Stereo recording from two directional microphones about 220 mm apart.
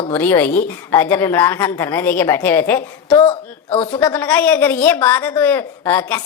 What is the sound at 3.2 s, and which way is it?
Speech, 25° left (ahead or behind).